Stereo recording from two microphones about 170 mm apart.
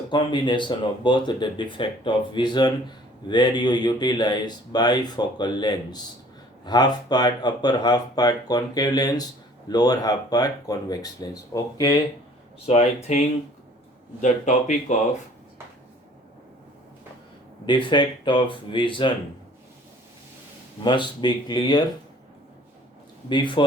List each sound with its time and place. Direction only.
0.1 s speech: 25° left (ahead or behind)
12.6 s speech: 40° left (ahead or behind)
17.7 s speech: 30° left (ahead or behind)
20.8 s speech: 25° left (ahead or behind)
23.3 s speech: 30° left (ahead or behind)